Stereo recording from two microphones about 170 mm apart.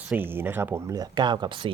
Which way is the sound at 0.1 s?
10° right (ahead or behind).